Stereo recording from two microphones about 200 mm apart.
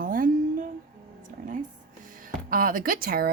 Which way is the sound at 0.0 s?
45° right (ahead or behind).